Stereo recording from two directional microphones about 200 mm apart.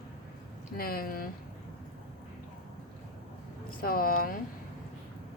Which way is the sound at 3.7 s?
45° left (ahead or behind).